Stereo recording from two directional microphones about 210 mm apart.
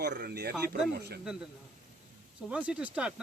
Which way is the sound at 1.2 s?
5° right (ahead or behind).